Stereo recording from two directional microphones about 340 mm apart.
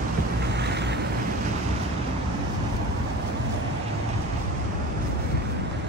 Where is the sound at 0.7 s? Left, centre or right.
Right.